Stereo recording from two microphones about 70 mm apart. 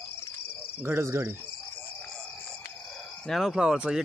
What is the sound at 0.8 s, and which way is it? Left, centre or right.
Speech, right.